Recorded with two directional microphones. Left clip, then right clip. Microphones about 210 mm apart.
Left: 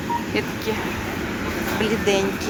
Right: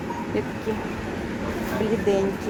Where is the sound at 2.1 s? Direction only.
20° right (ahead or behind).